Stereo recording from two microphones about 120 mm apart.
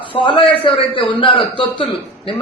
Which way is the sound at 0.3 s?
50° left (ahead or behind).